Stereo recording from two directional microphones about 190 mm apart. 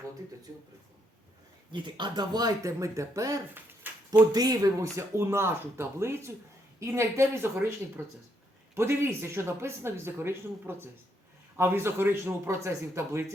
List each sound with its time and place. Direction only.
0.5 s speech: 20° right (ahead or behind)
1.7 s speech: 25° right (ahead or behind)